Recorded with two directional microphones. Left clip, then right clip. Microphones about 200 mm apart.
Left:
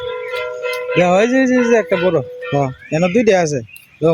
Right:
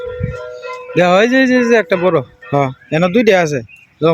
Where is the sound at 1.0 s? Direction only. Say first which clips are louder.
Right 3 dB; 5° right (ahead or behind).